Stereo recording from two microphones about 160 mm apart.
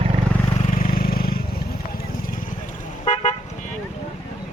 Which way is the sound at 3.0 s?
45° left (ahead or behind).